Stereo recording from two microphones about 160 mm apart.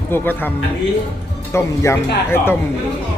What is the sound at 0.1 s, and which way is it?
Speech, 10° left (ahead or behind).